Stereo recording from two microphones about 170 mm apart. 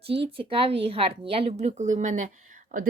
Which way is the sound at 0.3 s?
30° right (ahead or behind).